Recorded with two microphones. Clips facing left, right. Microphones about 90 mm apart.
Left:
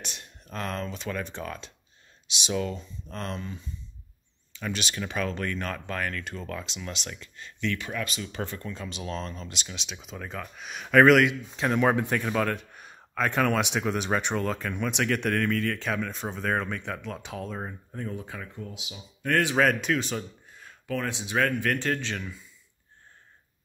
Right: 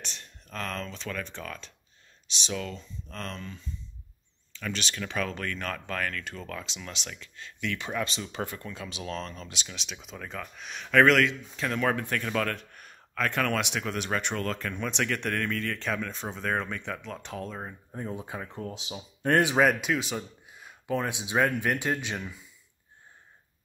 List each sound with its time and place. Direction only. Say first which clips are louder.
0.0 s a man's voice: left 2 dB; 15° left (ahead or behind)
7.7 s speech: right 1 dB; 20° right (ahead or behind)
8.2 s a man's voice: left 1 dB; 10° right (ahead or behind); by 17.7 s 5° left (ahead or behind)
17.9 s speech: right 1 dB; 20° right (ahead or behind)
18.6 s speech: right 3 dB; 35° right (ahead or behind)
19.3 s speech: right 1 dB; 20° right (ahead or behind)
19.6 s speech: even; 5° right (ahead or behind)